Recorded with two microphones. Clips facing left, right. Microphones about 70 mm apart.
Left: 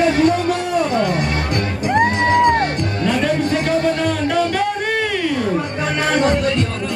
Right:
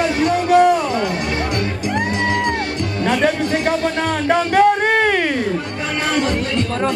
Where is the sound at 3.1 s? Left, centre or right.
Right.